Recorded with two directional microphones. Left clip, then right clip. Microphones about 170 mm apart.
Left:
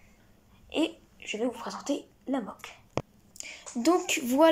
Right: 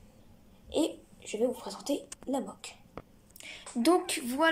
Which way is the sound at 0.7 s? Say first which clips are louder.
Left 1 dB; 25° right (ahead or behind).